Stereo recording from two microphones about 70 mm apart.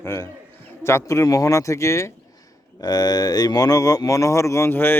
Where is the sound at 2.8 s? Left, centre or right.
Left.